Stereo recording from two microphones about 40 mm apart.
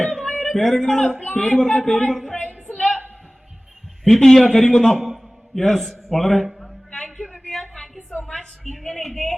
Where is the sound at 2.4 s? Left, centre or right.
Left.